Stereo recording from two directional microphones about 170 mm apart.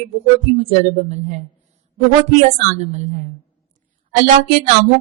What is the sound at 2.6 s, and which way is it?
Speech, 45° right (ahead or behind).